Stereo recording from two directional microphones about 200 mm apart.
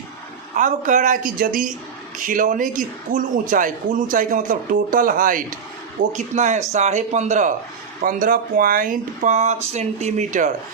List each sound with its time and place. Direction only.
0.5 s a man's voice: 40° right (ahead or behind)